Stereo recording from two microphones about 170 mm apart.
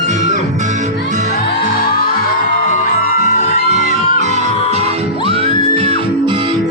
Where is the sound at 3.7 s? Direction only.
45° right (ahead or behind).